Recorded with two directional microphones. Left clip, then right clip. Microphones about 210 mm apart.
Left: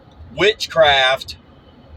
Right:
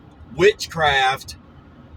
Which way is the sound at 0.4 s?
15° right (ahead or behind).